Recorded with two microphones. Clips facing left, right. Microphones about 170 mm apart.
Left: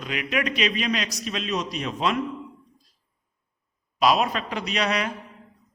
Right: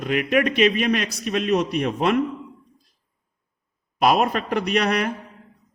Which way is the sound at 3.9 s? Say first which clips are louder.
Right 3 dB; 50° right (ahead or behind).